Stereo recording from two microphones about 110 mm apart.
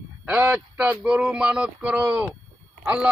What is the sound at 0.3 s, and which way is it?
Speech, 10° right (ahead or behind).